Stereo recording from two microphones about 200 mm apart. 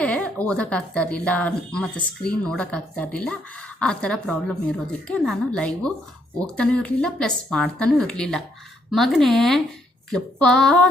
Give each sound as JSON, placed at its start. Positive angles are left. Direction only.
{"t": 0.0, "sound": "speech", "side_deg": 5}